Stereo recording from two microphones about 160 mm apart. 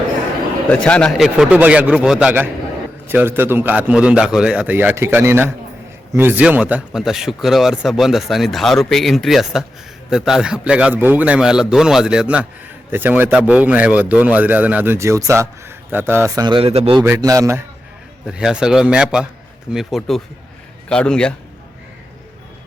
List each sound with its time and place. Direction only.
0.7 s speech: 5° left (ahead or behind); by 17.0 s 40° right (ahead or behind)
17.2 s speech: 20° right (ahead or behind)
18.3 s speech: 5° right (ahead or behind)